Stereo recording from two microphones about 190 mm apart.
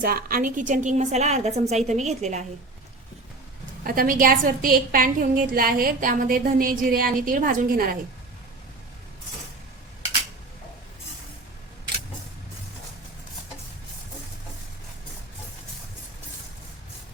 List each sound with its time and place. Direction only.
0.0 s a woman's voice: 50° right (ahead or behind)
3.8 s a woman's voice: 45° right (ahead or behind)